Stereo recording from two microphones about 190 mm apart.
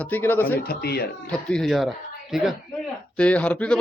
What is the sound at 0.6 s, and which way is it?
Speech, 55° left (ahead or behind).